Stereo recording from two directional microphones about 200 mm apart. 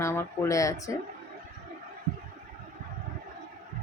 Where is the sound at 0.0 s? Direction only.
15° left (ahead or behind).